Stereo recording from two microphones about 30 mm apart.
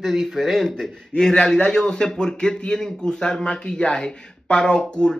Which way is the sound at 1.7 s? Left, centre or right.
Left.